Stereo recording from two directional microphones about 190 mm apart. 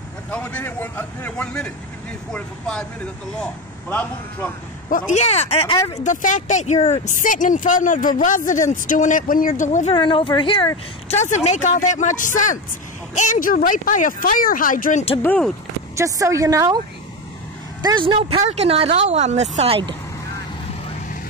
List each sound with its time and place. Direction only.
0.3 s speech: 10° left (ahead or behind)
3.9 s speech: 10° left (ahead or behind)
4.8 s speech: 40° left (ahead or behind)
5.8 s speech: 20° left (ahead or behind)
6.0 s speech: 40° left (ahead or behind)
9.9 s speech: 25° left (ahead or behind)
15.2 s speech: 5° left (ahead or behind)
16.0 s a woman's voice: 15° right (ahead or behind)
17.8 s speech: 25° right (ahead or behind)